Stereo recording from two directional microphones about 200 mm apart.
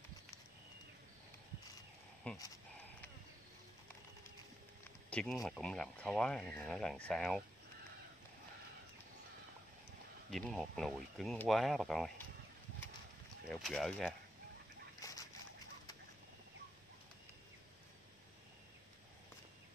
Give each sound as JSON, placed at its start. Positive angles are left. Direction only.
{"t": 2.3, "sound": "speech", "side_deg": 5}
{"t": 5.1, "sound": "speech", "side_deg": 0}
{"t": 10.3, "sound": "speech", "side_deg": 0}
{"t": 13.5, "sound": "speech", "side_deg": 0}
{"t": 15.0, "sound": "fowl", "side_deg": 15}